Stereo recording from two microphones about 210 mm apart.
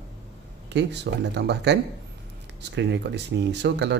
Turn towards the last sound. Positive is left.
turn(degrees=-55)  # may be behind; listen again after turning